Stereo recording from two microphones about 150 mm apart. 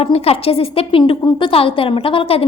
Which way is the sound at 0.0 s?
40° left (ahead or behind).